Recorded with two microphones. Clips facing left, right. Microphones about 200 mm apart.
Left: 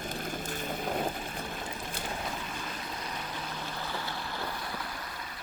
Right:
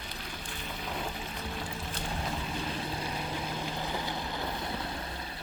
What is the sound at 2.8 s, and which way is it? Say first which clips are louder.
Vehicle: right 4 dB; 30° right (ahead or behind).